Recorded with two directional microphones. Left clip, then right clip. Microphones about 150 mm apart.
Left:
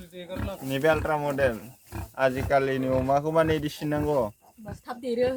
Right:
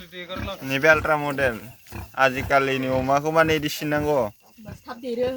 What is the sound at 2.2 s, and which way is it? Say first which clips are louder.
Speech: right 4 dB; 15° right (ahead or behind).